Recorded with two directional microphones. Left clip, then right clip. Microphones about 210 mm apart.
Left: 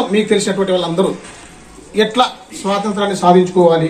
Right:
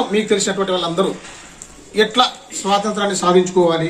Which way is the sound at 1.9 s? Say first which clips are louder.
Left 1 dB; 5° right (ahead or behind).